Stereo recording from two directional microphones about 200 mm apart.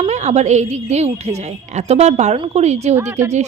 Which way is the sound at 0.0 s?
35° right (ahead or behind).